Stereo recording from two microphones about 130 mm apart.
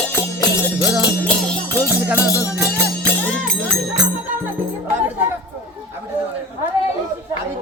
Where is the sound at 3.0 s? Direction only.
5° left (ahead or behind).